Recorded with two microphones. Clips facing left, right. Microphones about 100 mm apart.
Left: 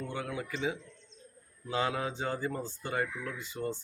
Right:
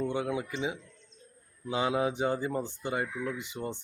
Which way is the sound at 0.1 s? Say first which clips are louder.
Right 5 dB; 20° right (ahead or behind).